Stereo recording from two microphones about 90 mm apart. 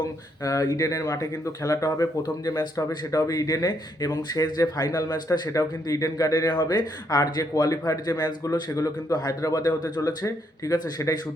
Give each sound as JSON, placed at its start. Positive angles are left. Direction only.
{"t": 0.4, "sound": "speech", "side_deg": 45}